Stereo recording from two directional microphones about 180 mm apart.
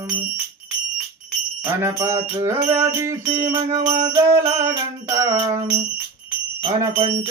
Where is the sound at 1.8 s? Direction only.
15° right (ahead or behind).